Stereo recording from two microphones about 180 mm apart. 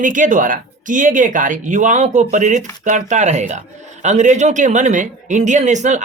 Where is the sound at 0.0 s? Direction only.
45° right (ahead or behind).